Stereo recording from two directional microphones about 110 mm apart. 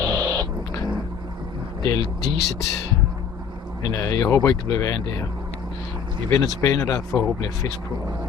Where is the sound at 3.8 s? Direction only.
30° left (ahead or behind).